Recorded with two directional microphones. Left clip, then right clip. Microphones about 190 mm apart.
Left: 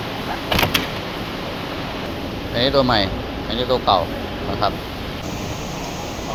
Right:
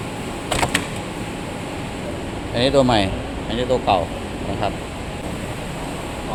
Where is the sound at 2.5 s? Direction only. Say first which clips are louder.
Even; 30° right (ahead or behind).